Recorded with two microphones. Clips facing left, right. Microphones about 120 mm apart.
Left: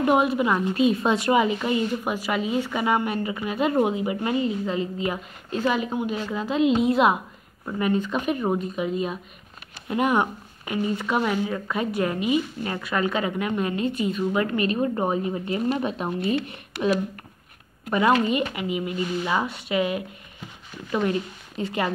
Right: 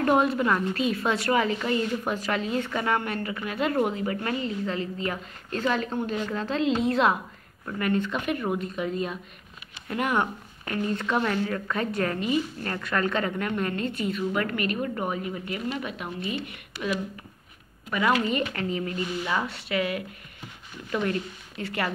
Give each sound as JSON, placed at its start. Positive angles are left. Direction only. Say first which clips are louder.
{"t": 0.0, "sound": "a woman's voice", "louder": "left 2 dB", "side_deg": 15}
{"t": 16.7, "sound": "speech", "louder": "left 7 dB", "side_deg": 65}
{"t": 17.9, "sound": "a woman's voice", "louder": "left 4 dB", "side_deg": 25}
{"t": 18.5, "sound": "a woman's voice", "louder": "left 2 dB", "side_deg": 10}